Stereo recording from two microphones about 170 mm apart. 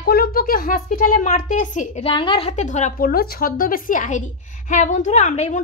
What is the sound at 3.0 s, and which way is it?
A woman's voice, 65° left (ahead or behind).